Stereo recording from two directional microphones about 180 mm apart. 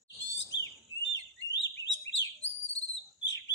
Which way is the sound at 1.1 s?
90° left.